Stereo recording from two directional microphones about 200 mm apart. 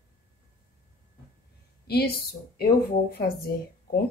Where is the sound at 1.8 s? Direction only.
50° left (ahead or behind).